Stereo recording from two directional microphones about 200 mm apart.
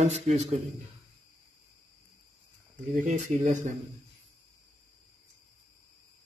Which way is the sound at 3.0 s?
40° right (ahead or behind).